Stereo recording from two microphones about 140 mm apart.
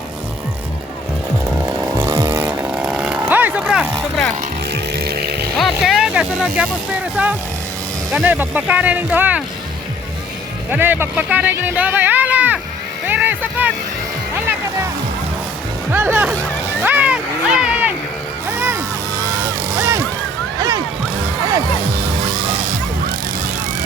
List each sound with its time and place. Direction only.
2.0 s chainsaw: 25° right (ahead or behind); by 3.8 s 10° right (ahead or behind)
5.5 s speech: centre (ahead or behind)
10.7 s speech: 15° right (ahead or behind)
13.1 s vehicle: 15° right (ahead or behind)
15.9 s speech: 15° right (ahead or behind)
16.8 s a sound: 10° right (ahead or behind)
18.5 s music: 15° right (ahead or behind)
19.7 s a sound: 20° right (ahead or behind)